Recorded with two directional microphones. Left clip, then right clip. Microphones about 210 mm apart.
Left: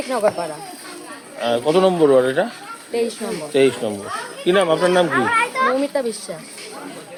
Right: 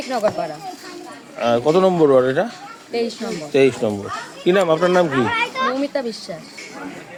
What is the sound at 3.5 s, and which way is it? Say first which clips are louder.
Speech: right 1 dB; 30° right (ahead or behind).